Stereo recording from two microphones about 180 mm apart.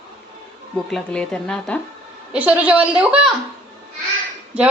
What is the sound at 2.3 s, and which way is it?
Speech, 10° right (ahead or behind).